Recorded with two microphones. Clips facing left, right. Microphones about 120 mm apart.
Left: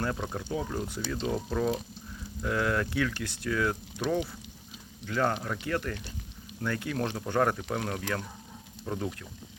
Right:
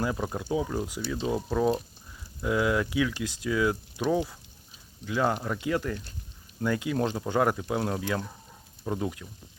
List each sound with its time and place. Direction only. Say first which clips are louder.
0.0 s speech: right 2 dB; 10° right (ahead or behind)